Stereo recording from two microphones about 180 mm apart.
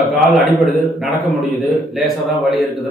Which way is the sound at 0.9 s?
Centre (ahead or behind).